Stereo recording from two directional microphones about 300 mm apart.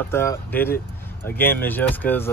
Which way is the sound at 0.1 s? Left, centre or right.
Centre.